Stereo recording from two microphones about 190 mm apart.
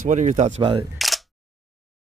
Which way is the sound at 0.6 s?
25° right (ahead or behind).